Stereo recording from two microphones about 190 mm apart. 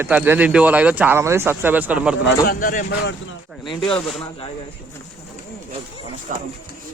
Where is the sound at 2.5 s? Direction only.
45° left (ahead or behind).